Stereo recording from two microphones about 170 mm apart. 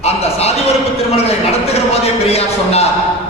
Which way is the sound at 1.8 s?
35° left (ahead or behind).